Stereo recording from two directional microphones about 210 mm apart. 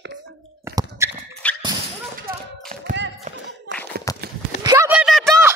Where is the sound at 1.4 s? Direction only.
5° left (ahead or behind).